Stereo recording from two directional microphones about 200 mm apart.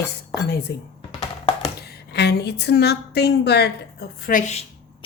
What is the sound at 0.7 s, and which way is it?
A woman's voice, 55° left (ahead or behind).